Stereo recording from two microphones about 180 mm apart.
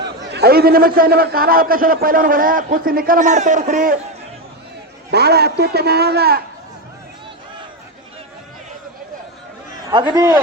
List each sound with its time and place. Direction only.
0.0 s a man's voice: 70° right (ahead or behind); by 3.9 s 45° right (ahead or behind)
5.1 s a man's voice: 65° right (ahead or behind)
10.1 s a man's voice: 10° right (ahead or behind)